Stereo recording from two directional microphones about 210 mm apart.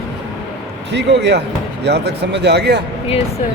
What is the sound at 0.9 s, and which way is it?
Speech, 55° right (ahead or behind).